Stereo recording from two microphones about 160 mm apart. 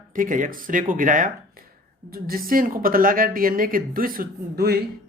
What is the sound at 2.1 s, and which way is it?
Speech, 65° right (ahead or behind).